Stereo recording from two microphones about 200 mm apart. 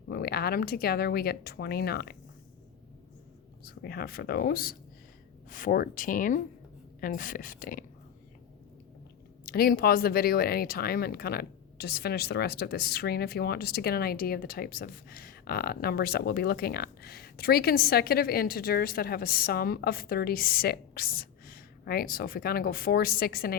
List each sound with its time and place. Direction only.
0.1 s speech: 50° left (ahead or behind)
3.6 s speech: 50° left (ahead or behind)
9.5 s speech: 50° left (ahead or behind)